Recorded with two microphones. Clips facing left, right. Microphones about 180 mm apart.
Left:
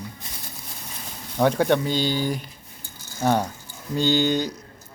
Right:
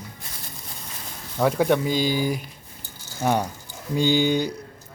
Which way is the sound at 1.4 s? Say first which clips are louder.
Even; 5° right (ahead or behind).